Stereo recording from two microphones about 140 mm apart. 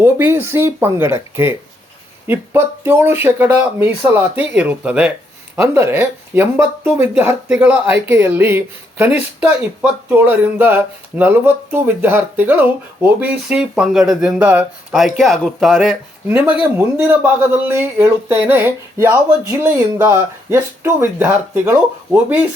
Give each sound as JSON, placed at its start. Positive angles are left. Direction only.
{"t": 0.0, "sound": "speech", "side_deg": -15}